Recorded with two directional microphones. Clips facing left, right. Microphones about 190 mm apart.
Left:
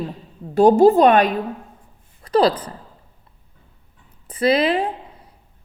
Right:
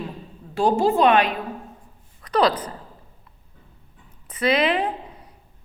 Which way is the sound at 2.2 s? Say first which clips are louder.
Left 3 dB; 30° left (ahead or behind).